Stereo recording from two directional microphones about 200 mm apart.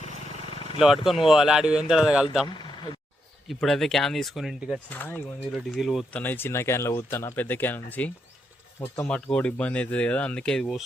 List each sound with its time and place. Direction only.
0.0 s vehicle: 30° left (ahead or behind)
1.3 s speech: centre (ahead or behind)
2.5 s vehicle: 20° left (ahead or behind)
3.5 s speech: centre (ahead or behind)
4.9 s speech: 10° left (ahead or behind)
5.5 s speech: centre (ahead or behind)
6.2 s speech: 10° left (ahead or behind)